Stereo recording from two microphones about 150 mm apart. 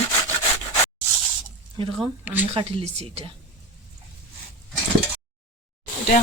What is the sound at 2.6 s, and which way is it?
Speech, 40° right (ahead or behind).